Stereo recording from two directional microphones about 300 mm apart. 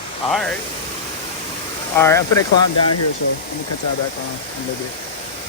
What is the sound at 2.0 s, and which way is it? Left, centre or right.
Speech, centre.